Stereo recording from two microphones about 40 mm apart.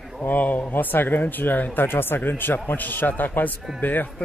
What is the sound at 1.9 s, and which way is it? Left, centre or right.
Speech, left.